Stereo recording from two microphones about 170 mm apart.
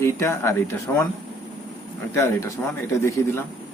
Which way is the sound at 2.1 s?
20° left (ahead or behind).